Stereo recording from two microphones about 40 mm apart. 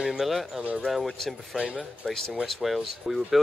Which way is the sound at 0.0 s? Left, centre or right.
Centre.